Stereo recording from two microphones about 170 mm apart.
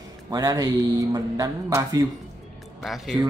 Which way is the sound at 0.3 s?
20° right (ahead or behind).